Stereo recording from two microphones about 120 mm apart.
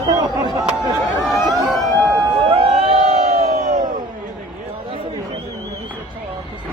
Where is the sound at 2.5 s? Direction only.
55° right (ahead or behind); by 3.8 s 80° right.